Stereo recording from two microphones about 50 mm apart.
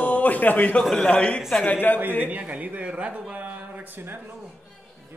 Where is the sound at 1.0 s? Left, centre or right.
Left.